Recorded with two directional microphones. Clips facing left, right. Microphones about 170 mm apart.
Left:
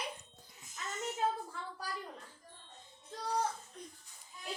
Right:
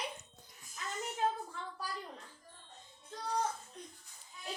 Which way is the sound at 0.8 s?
20° left (ahead or behind).